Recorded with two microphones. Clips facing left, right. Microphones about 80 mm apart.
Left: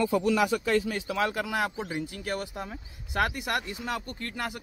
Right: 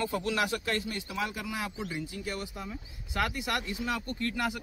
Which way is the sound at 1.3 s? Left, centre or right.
Left.